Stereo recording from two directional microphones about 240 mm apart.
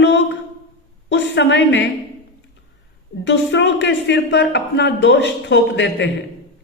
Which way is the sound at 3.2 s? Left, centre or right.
Left.